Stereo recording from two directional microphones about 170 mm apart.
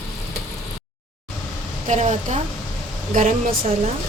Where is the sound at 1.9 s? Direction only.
45° right (ahead or behind).